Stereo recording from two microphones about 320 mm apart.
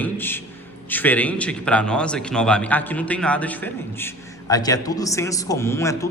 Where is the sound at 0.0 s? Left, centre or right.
Centre.